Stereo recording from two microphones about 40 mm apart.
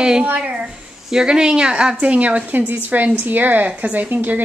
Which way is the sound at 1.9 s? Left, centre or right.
Right.